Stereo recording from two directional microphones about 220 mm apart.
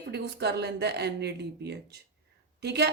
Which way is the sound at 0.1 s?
50° right (ahead or behind).